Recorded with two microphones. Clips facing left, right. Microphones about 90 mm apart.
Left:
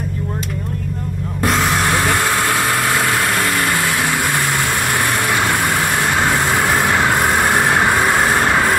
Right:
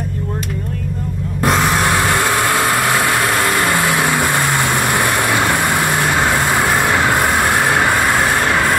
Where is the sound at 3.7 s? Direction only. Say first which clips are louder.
Right 3 dB; 20° right (ahead or behind).